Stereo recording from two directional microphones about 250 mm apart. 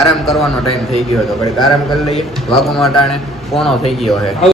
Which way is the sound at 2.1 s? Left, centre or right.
Centre.